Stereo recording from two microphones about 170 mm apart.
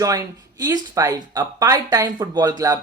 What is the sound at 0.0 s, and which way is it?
Speech, 20° right (ahead or behind).